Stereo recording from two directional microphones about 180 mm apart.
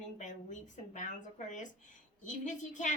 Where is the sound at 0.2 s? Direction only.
40° left (ahead or behind).